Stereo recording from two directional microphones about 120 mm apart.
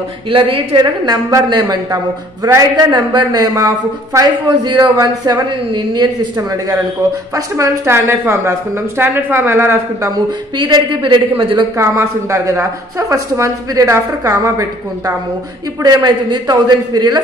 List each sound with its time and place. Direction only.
0.3 s a woman's voice: 45° right (ahead or behind); by 10.1 s 20° right (ahead or behind)
10.7 s a man's voice: 40° right (ahead or behind)
11.7 s a man's voice: 25° right (ahead or behind)